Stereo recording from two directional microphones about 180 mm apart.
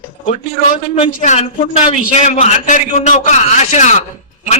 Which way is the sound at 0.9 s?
40° left (ahead or behind).